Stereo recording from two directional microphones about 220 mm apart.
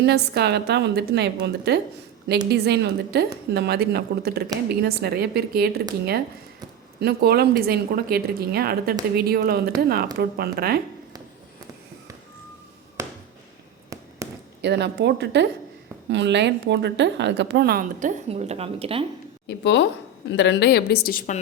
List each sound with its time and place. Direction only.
0.0 s a woman's voice: 50° right (ahead or behind)
7.0 s a woman's voice: 45° right (ahead or behind)
13.0 s a sound: 15° right (ahead or behind)
14.2 s a sound: 15° right (ahead or behind)
14.6 s a woman's voice: 50° right (ahead or behind)
18.3 s speech: 30° right (ahead or behind)
19.5 s a woman's voice: 50° left (ahead or behind)